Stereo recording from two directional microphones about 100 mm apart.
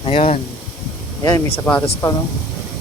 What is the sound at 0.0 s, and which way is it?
Speech, 85° left.